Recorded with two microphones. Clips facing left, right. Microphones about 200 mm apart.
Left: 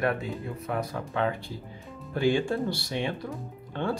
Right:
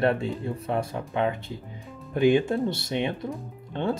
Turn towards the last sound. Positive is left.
turn(degrees=-20)  # may be behind; listen again after turning